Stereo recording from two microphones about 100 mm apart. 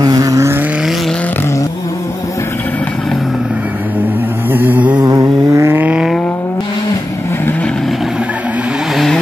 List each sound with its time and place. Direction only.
0.0 s vehicle: 40° right (ahead or behind)
4.5 s a sound: 20° right (ahead or behind)
5.0 s vehicle: 35° right (ahead or behind)
8.9 s vehicle: 5° left (ahead or behind)